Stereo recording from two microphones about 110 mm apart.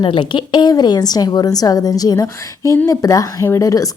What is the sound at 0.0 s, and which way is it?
Speech, 50° left (ahead or behind).